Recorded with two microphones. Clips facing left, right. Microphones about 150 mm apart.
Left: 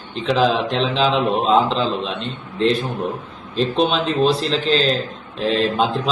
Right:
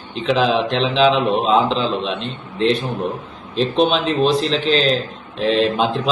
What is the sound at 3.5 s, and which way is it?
A man's voice, centre (ahead or behind).